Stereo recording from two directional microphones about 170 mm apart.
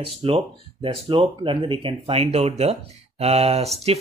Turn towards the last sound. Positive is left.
turn(degrees=-35)  # may be behind; listen again after turning